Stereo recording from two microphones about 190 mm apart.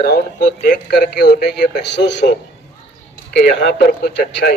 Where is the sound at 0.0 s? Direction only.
55° left (ahead or behind).